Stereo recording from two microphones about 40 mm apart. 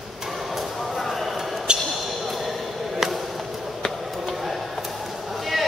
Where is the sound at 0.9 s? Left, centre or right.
Centre.